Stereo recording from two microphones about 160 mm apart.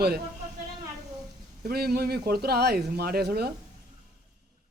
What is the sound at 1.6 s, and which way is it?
A man's voice, 75° right (ahead or behind).